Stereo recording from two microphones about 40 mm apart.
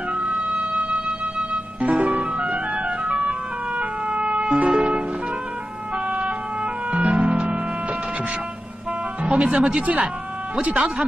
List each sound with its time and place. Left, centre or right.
0.1 s music: right
3.7 s emergency vehicle: right
4.7 s music: right
6.0 s music: right
9.2 s speech: right